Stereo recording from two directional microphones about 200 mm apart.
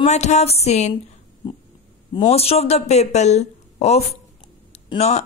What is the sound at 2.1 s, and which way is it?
Speech, 30° left (ahead or behind).